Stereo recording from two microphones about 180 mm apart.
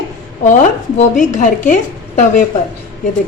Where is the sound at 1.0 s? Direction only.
45° left (ahead or behind).